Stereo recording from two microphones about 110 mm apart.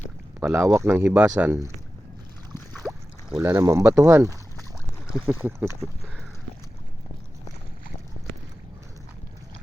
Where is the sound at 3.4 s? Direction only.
25° right (ahead or behind).